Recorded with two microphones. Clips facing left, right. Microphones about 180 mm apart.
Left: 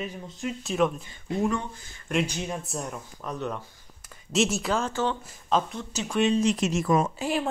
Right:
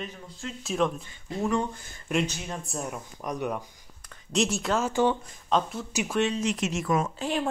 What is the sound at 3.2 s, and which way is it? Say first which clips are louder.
Speech: right 2 dB; 10° right (ahead or behind).